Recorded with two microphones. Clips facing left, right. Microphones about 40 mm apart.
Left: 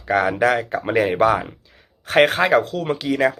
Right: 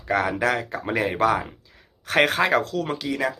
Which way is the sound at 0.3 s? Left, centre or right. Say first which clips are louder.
Left 5 dB; left.